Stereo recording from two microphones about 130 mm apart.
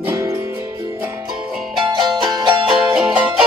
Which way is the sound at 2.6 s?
5° right (ahead or behind).